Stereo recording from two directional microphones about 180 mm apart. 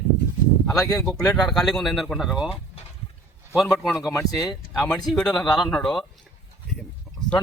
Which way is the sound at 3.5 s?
Centre (ahead or behind).